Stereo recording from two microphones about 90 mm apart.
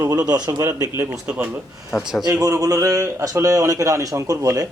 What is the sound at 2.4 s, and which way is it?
Speech, 40° right (ahead or behind).